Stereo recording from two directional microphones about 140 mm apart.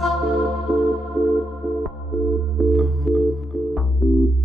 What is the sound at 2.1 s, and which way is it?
Music, centre (ahead or behind).